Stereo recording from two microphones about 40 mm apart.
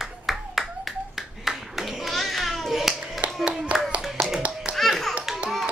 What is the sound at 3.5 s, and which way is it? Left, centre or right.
Clapping, centre.